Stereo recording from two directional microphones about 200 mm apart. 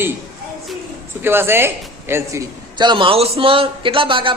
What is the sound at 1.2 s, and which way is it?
A woman's voice, 10° right (ahead or behind).